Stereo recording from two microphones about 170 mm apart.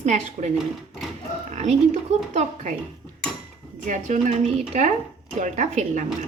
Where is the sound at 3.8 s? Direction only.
45° right (ahead or behind).